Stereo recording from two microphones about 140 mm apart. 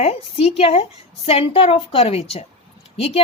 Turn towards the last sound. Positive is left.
turn(degrees=45)  # may be behind; listen again after turning